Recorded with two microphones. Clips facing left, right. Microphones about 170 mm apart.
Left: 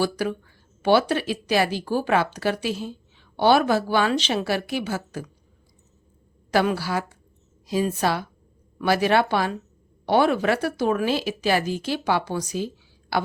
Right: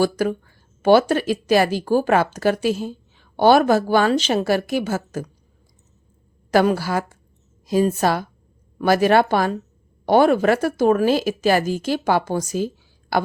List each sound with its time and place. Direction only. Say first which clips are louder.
0.0 s speech: right 5 dB; 45° right (ahead or behind)
6.5 s speech: right 4 dB; 45° right (ahead or behind)